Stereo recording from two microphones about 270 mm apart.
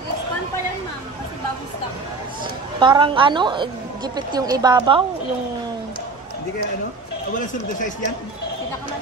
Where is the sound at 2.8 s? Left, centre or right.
Centre.